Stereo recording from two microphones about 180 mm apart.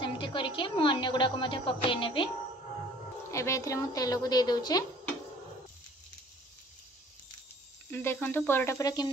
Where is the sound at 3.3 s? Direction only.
15° left (ahead or behind).